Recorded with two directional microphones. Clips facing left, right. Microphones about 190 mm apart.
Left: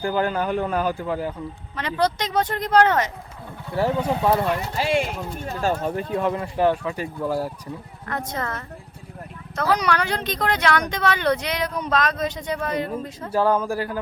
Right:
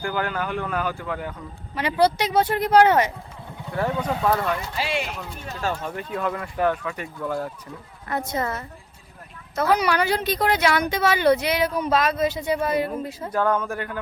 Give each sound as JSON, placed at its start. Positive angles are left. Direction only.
{"t": 0.0, "sound": "speech", "side_deg": 30}
{"t": 1.7, "sound": "speech", "side_deg": -10}
{"t": 3.8, "sound": "speech", "side_deg": 25}
{"t": 4.7, "sound": "speech", "side_deg": 45}
{"t": 5.5, "sound": "speech", "side_deg": 35}
{"t": 8.0, "sound": "speech", "side_deg": -10}
{"t": 13.3, "sound": "speech", "side_deg": 30}